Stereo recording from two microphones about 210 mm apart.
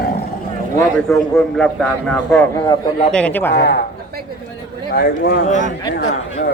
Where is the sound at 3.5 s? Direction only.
55° left (ahead or behind).